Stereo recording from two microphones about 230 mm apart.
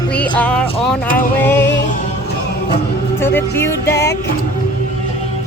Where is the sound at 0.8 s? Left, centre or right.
Centre.